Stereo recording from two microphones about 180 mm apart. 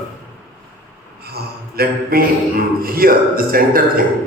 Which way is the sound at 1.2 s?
60° right (ahead or behind).